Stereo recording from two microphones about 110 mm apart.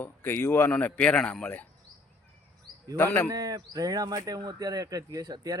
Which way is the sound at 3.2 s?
35° right (ahead or behind).